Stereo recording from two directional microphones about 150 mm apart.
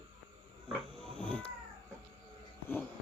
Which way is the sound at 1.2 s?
10° left (ahead or behind).